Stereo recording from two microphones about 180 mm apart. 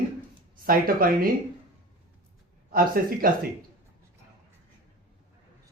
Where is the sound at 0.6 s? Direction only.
55° right (ahead or behind).